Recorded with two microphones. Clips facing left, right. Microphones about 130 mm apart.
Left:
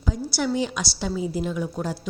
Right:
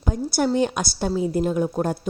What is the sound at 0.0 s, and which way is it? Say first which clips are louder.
Speech: right 4 dB; 50° right (ahead or behind).